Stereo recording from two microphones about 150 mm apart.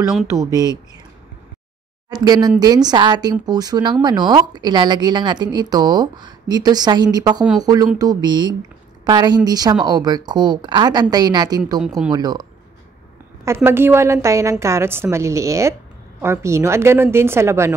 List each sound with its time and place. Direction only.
0.3 s a woman's voice: 20° right (ahead or behind)
2.0 s a woman's voice: 25° right (ahead or behind)
13.7 s a woman's voice: 15° right (ahead or behind)